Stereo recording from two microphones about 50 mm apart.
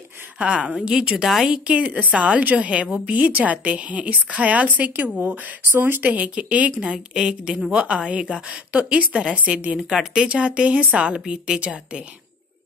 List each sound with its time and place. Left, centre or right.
0.4 s a woman's voice: right
1.1 s a woman's voice: centre
1.5 s a woman's voice: right
5.1 s a woman's voice: right
5.7 s speech: right
6.1 s a woman's voice: right
7.2 s a woman's voice: centre
9.8 s a woman's voice: centre